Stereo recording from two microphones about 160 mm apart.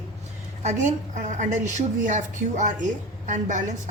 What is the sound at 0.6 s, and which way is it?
A woman's voice, 50° right (ahead or behind).